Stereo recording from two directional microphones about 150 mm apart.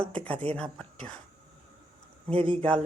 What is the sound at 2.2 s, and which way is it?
Speech, 40° right (ahead or behind).